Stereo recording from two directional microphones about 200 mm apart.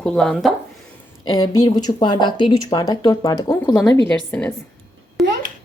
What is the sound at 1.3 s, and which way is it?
Speech, 20° left (ahead or behind).